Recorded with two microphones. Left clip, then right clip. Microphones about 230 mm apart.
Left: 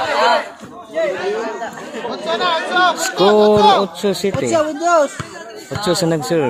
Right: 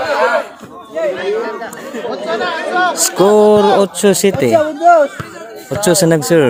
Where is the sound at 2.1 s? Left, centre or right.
Left.